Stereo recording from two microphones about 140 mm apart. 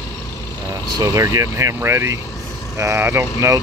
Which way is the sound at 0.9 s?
25° right (ahead or behind).